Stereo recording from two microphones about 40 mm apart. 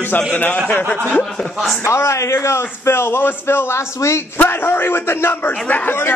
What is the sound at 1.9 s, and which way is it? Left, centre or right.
A man's voice, left.